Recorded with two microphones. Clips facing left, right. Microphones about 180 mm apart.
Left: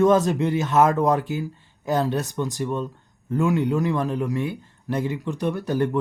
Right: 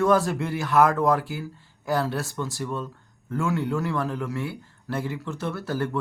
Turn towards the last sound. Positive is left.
turn(degrees=20)  # may be behind; listen again after turning